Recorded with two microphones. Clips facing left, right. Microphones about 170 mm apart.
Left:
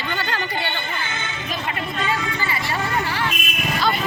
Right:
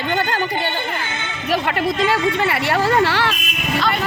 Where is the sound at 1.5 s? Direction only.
70° right (ahead or behind).